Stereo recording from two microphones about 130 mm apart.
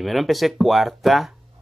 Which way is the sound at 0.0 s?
Centre (ahead or behind).